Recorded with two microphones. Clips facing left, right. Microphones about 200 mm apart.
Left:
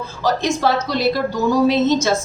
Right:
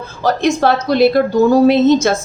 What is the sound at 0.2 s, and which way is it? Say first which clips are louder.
Speech: right 5 dB; 55° right (ahead or behind).